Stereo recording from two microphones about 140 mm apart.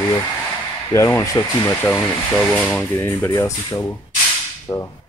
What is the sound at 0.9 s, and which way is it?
Speech, 20° left (ahead or behind).